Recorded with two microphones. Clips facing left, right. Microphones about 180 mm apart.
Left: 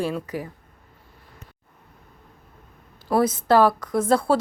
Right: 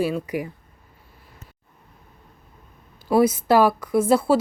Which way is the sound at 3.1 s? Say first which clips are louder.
Right 2 dB; 10° right (ahead or behind).